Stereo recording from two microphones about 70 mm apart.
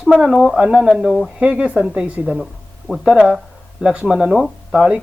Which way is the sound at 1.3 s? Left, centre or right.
Centre.